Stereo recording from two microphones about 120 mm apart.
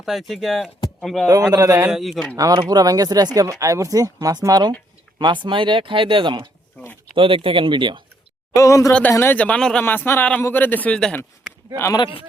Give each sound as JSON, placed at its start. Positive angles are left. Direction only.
{"t": 0.0, "sound": "speech", "side_deg": 0}
{"t": 1.5, "sound": "speech", "side_deg": -30}
{"t": 1.9, "sound": "speech", "side_deg": 0}
{"t": 2.3, "sound": "speech", "side_deg": -30}
{"t": 6.8, "sound": "a sound", "side_deg": 15}
{"t": 7.2, "sound": "speech", "side_deg": -45}
{"t": 8.5, "sound": "speech", "side_deg": 25}
{"t": 8.9, "sound": "a man's voice", "side_deg": 10}
{"t": 9.8, "sound": "a man's voice", "side_deg": 20}
{"t": 11.9, "sound": "a man's voice", "side_deg": 50}